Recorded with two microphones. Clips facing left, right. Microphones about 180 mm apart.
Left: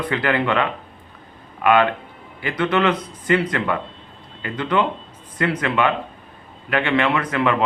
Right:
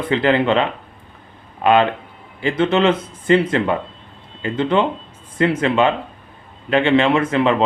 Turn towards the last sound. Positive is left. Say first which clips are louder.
# right 4 dB
turn(degrees=-25)  # may be behind; listen again after turning